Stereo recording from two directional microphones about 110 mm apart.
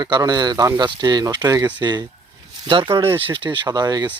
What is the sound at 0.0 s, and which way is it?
Speech, 40° right (ahead or behind).